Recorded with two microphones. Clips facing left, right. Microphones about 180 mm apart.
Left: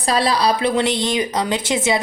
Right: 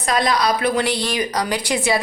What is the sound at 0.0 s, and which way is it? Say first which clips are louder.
A woman's voice: left 1 dB; 30° left (ahead or behind).